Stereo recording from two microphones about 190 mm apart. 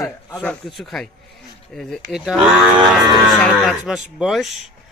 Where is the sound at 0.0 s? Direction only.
15° left (ahead or behind).